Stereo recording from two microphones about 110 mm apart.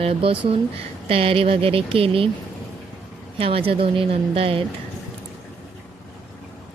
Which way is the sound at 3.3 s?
60° right (ahead or behind).